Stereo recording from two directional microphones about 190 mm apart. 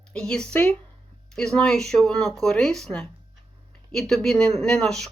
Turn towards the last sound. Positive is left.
turn(degrees=0)  # may be behind; listen again after turning